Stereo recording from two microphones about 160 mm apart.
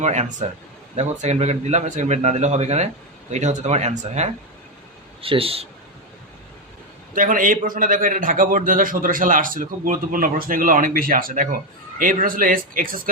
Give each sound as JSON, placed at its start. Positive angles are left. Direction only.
{"t": 0.0, "sound": "a man's voice", "side_deg": -45}
{"t": 7.1, "sound": "a man's voice", "side_deg": -55}